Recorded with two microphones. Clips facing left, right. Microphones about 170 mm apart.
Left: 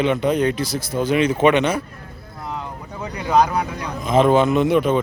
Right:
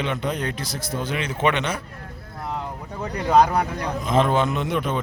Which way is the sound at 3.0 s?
55° right (ahead or behind).